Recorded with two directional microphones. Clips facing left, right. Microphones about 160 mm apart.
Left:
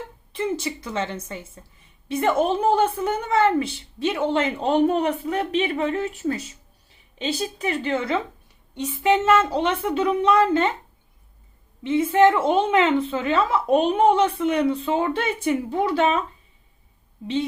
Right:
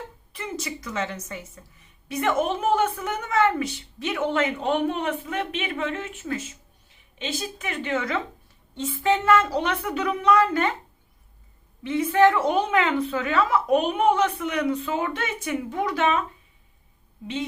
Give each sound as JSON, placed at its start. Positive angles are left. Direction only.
{"t": 0.3, "sound": "a woman's voice", "side_deg": 25}
{"t": 8.7, "sound": "a woman's voice", "side_deg": 15}
{"t": 11.8, "sound": "a woman's voice", "side_deg": 20}